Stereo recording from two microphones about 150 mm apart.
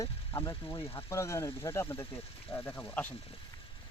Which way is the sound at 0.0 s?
15° left (ahead or behind).